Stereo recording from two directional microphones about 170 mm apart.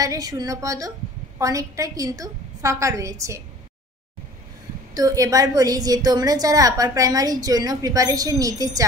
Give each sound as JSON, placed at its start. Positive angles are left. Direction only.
{"t": 0.0, "sound": "a woman's voice", "side_deg": -20}
{"t": 4.9, "sound": "a woman's voice", "side_deg": -20}